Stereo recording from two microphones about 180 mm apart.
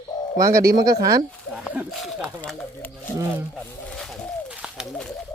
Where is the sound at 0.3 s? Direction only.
20° right (ahead or behind).